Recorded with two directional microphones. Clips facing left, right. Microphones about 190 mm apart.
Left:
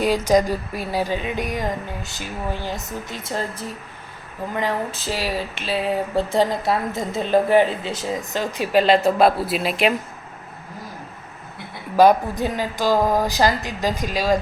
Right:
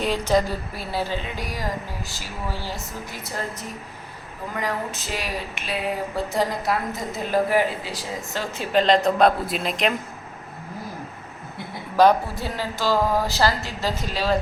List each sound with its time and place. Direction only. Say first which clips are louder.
0.0 s a woman's voice: left 4 dB; 10° left (ahead or behind)
11.9 s a woman's voice: left 3 dB; 15° left (ahead or behind)